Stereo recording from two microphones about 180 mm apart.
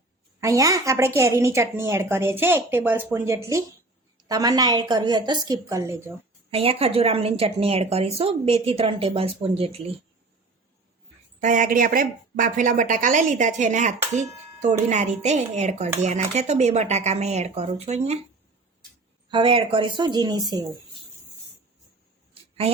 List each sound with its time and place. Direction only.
0.3 s a woman's voice: 20° right (ahead or behind)
6.5 s a woman's voice: 30° right (ahead or behind)
11.3 s a woman's voice: 45° right (ahead or behind)
19.3 s a woman's voice: 30° right (ahead or behind)